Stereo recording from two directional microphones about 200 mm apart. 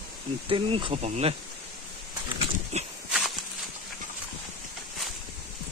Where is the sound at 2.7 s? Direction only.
35° right (ahead or behind).